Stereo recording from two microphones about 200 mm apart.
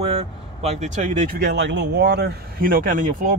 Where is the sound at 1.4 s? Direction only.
60° right (ahead or behind); by 3.3 s 40° right (ahead or behind).